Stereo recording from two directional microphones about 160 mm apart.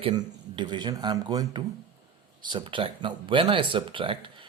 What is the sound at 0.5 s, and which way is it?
Speech, 30° right (ahead or behind).